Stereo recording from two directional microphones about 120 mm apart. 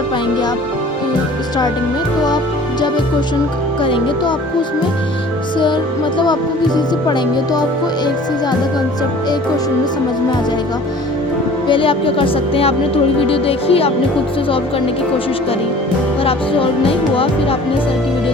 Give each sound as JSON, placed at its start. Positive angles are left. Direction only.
{"t": 3.8, "sound": "speech", "side_deg": 45}
{"t": 5.5, "sound": "speech", "side_deg": 40}
{"t": 11.7, "sound": "speech", "side_deg": 45}
{"t": 16.2, "sound": "speech", "side_deg": 50}